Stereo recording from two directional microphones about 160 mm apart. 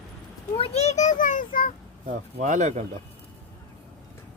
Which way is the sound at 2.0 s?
50° right (ahead or behind).